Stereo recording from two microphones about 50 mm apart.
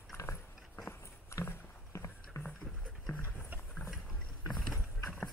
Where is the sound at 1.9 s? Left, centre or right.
Left.